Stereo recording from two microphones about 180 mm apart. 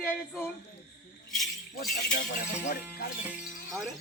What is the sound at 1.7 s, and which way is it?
Speech, 65° left (ahead or behind).